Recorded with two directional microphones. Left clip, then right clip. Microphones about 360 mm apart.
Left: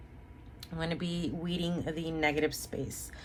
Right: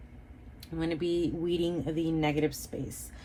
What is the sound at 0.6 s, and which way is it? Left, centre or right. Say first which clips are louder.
Speech: right 5 dB; left.